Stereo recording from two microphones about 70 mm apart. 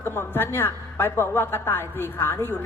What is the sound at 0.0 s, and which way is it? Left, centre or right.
A woman's voice, left.